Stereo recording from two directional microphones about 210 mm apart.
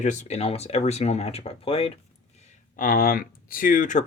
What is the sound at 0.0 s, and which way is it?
Speech, 35° left (ahead or behind).